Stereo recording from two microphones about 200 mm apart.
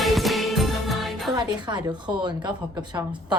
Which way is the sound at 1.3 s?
20° right (ahead or behind).